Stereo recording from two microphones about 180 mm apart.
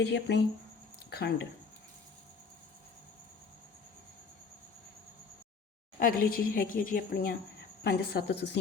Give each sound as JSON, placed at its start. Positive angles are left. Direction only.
{"t": 0.0, "sound": "a woman's voice", "side_deg": 70}
{"t": 6.0, "sound": "a woman's voice", "side_deg": 55}